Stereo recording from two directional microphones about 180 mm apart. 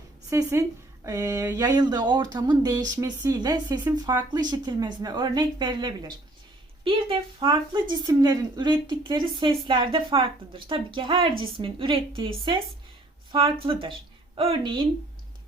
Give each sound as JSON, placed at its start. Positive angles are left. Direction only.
{"t": 0.3, "sound": "speech", "side_deg": -15}
{"t": 13.3, "sound": "speech", "side_deg": -30}